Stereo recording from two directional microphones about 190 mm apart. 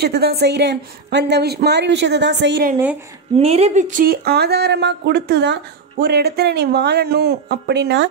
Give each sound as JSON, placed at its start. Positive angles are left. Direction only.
{"t": 0.0, "sound": "speech", "side_deg": -55}
{"t": 3.3, "sound": "speech", "side_deg": -30}